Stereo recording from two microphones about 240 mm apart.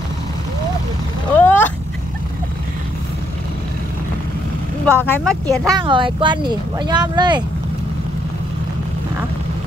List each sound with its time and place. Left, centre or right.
1.3 s cat: centre
4.8 s speech: centre
5.8 s speech: centre